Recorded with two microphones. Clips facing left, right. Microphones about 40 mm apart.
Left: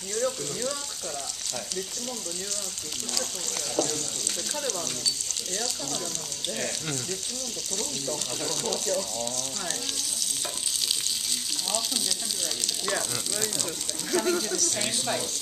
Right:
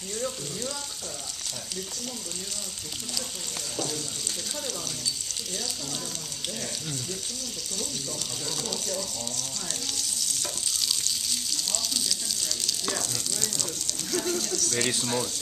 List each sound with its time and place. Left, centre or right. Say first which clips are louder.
0.2 s speech: left 5 dB; centre
8.6 s speech: left 4 dB; centre
11.1 s frying: even; centre
14.1 s speech: left 3 dB; left
14.7 s speech: right 2 dB; right